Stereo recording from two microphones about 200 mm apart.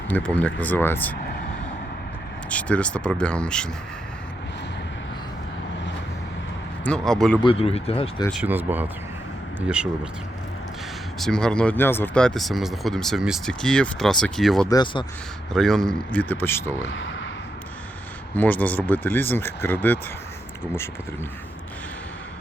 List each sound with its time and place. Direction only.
0.1 s speech: 5° left (ahead or behind)
2.5 s speech: 5° left (ahead or behind)
6.8 s speech: 5° left (ahead or behind)
7.4 s speech: 30° left (ahead or behind)
8.3 s speech: 5° right (ahead or behind)
11.2 s speech: 5° left (ahead or behind)
14.7 s speech: 20° left (ahead or behind)
15.5 s speech: centre (ahead or behind)
16.8 s speech: 70° left (ahead or behind)
18.3 s speech: 10° left (ahead or behind)